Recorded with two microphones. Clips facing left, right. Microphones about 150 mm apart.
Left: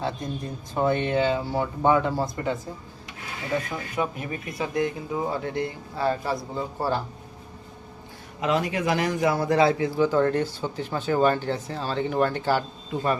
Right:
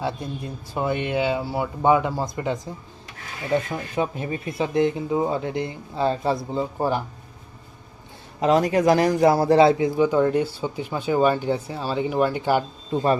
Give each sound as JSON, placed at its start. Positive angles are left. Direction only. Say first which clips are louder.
{"t": 0.7, "sound": "a man's voice", "louder": "left 1 dB", "side_deg": -10}
{"t": 3.7, "sound": "speech", "louder": "right 3 dB", "side_deg": -25}
{"t": 8.4, "sound": "a man's voice", "louder": "right 6 dB", "side_deg": -40}
{"t": 12.9, "sound": "speech", "louder": "right 5 dB", "side_deg": -30}